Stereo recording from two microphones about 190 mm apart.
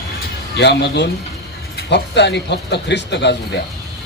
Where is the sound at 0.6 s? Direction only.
65° left (ahead or behind).